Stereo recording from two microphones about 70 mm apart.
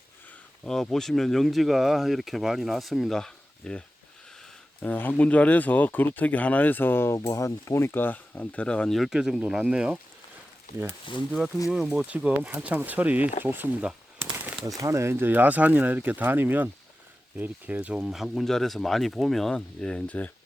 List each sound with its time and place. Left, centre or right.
0.6 s speech: centre
4.8 s speech: left
7.2 s speech: left; by 8.9 s centre
8.9 s speech: centre
11.3 s speech: centre
11.9 s speech: centre
14.2 s a sound: right
14.8 s speech: right; by 18.1 s centre
18.1 s speech: centre; by 20.3 s left